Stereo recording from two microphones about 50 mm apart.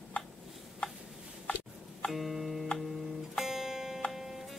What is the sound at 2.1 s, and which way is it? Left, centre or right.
Music, centre.